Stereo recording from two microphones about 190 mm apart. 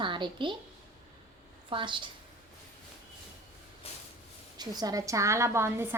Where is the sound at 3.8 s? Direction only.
30° left (ahead or behind).